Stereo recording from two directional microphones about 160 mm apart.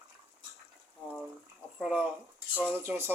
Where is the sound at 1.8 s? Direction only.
5° right (ahead or behind).